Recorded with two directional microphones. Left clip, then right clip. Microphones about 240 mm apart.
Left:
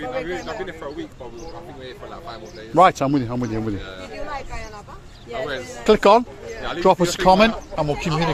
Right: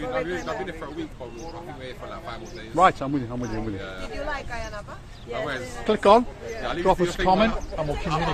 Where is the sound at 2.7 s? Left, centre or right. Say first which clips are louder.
Left 5 dB; left.